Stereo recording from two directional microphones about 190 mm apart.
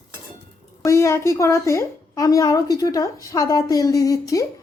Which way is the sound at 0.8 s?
15° left (ahead or behind).